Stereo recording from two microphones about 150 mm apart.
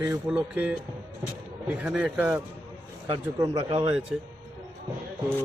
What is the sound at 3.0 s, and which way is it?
Speech, 20° right (ahead or behind).